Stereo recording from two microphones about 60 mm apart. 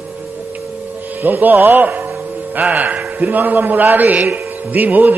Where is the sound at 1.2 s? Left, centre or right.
Right.